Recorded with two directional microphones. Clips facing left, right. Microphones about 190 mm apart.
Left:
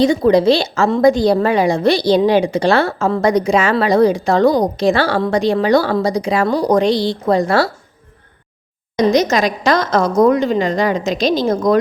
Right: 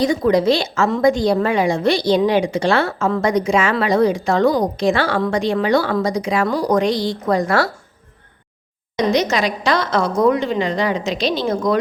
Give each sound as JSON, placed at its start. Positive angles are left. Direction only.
{"t": 0.0, "sound": "a woman's voice", "side_deg": 30}
{"t": 9.0, "sound": "a woman's voice", "side_deg": 45}